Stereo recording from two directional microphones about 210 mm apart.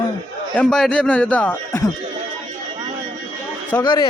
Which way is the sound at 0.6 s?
5° left (ahead or behind).